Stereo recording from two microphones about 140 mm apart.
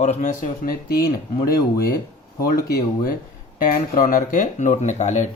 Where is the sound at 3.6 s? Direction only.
80° left; by 5.3 s 55° left (ahead or behind).